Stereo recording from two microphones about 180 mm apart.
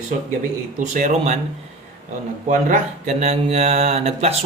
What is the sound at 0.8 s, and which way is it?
Speech, 40° right (ahead or behind).